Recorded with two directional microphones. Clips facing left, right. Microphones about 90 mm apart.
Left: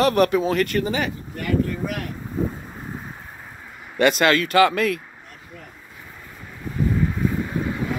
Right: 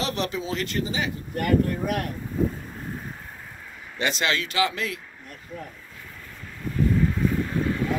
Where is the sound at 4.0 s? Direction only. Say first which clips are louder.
Left 8 dB; 55° left (ahead or behind).